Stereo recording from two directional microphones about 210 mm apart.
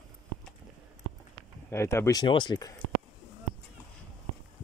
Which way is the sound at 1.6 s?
10° left (ahead or behind).